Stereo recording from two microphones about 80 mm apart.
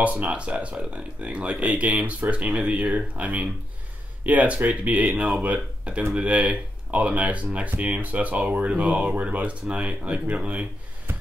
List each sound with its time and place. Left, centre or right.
0.0 s speech: centre